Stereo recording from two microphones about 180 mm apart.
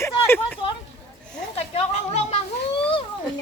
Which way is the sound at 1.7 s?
40° left (ahead or behind).